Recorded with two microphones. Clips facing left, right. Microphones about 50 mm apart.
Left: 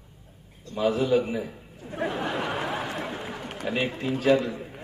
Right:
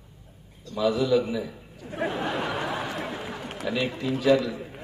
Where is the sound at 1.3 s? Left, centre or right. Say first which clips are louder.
Even; left.